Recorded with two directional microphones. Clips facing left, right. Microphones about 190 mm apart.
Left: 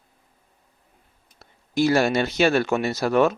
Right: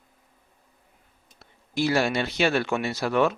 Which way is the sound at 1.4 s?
45° left (ahead or behind).